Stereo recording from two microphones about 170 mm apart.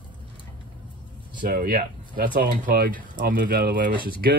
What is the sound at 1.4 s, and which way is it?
Speech, 60° right (ahead or behind).